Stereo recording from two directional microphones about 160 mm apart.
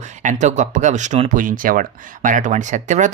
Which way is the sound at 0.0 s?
50° right (ahead or behind).